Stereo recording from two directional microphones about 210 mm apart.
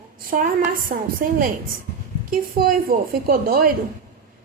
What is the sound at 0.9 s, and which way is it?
A woman's voice, 40° right (ahead or behind).